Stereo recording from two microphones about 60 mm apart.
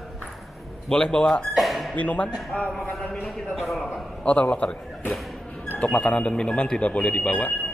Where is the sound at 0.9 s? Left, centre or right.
Centre.